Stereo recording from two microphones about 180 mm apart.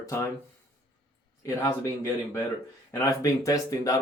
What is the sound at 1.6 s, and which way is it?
Speech, 15° left (ahead or behind).